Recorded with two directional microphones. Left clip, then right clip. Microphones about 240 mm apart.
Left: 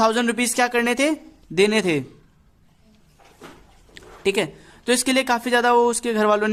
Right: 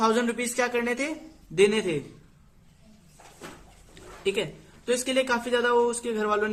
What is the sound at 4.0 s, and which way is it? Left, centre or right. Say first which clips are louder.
A man's voice: left 6 dB; left.